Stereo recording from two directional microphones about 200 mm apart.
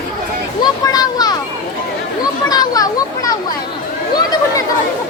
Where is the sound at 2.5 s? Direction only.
20° left (ahead or behind).